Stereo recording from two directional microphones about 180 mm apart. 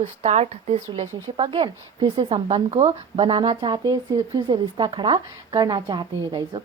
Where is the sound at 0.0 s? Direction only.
40° right (ahead or behind).